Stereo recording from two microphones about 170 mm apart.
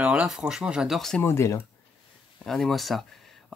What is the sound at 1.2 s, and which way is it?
Speech, 15° left (ahead or behind).